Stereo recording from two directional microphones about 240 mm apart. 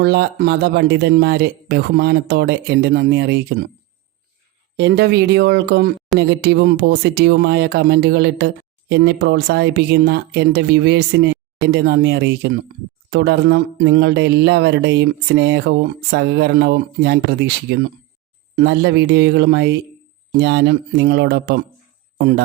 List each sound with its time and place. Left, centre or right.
0.0 s speech: right
4.8 s speech: right